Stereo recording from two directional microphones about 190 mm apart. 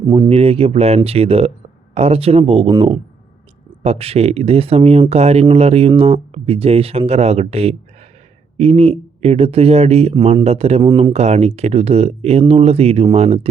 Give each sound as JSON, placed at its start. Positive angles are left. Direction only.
{"t": 0.0, "sound": "speech", "side_deg": -20}
{"t": 0.3, "sound": "speech", "side_deg": -30}